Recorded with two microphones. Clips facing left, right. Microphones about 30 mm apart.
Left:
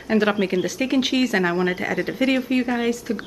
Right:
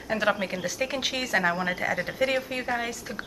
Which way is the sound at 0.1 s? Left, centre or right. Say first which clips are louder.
Left 6 dB; centre.